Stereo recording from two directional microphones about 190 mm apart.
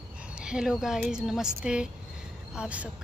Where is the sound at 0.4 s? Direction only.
5° right (ahead or behind).